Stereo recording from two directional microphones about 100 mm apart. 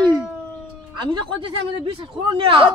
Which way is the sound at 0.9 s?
55° right (ahead or behind).